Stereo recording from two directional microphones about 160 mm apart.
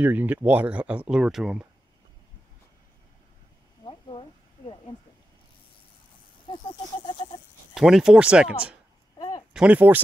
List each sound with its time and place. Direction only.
0.0 s speech: 10° right (ahead or behind)
3.8 s a sound: 35° left (ahead or behind)
7.7 s speech: 5° right (ahead or behind)